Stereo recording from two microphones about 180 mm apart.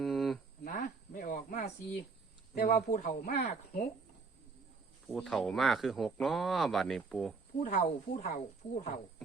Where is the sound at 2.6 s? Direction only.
50° left (ahead or behind).